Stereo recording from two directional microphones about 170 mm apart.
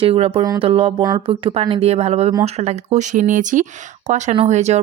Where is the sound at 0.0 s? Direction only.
35° right (ahead or behind).